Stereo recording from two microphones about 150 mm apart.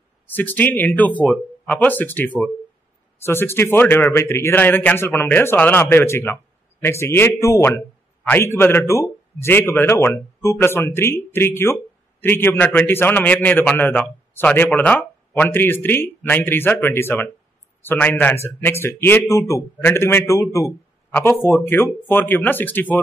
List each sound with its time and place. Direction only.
0.3 s speech: 10° left (ahead or behind)